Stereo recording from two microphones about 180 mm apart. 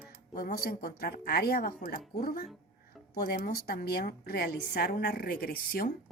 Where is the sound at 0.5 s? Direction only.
60° left (ahead or behind).